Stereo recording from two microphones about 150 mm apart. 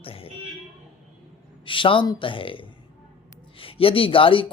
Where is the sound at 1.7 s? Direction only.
35° left (ahead or behind).